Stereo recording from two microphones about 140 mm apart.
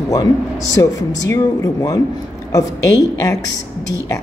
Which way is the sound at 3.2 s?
25° left (ahead or behind).